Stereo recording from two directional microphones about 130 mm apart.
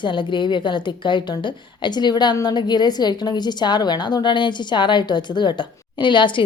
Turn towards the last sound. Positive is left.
turn(degrees=40)  # may be behind; listen again after turning